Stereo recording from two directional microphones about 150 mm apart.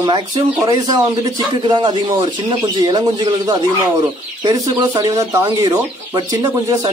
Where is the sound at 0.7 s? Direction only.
25° right (ahead or behind).